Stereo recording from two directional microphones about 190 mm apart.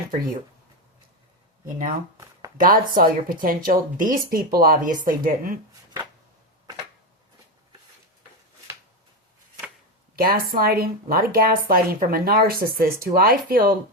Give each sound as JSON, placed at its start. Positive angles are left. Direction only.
{"t": 1.9, "sound": "a sound", "side_deg": -20}
{"t": 2.6, "sound": "speech", "side_deg": -50}
{"t": 10.2, "sound": "speech", "side_deg": -50}